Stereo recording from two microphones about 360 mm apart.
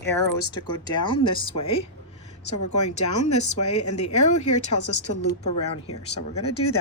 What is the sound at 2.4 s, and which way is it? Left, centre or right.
Speech, left.